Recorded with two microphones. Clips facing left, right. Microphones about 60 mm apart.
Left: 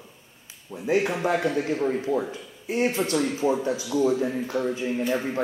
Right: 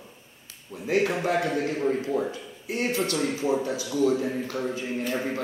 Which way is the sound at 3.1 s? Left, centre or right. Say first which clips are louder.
Left 2 dB; centre.